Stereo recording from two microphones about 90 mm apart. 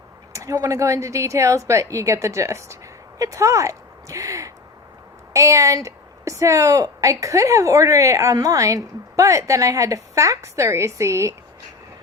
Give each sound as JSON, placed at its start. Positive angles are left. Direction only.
{"t": 0.3, "sound": "a woman's voice", "side_deg": -35}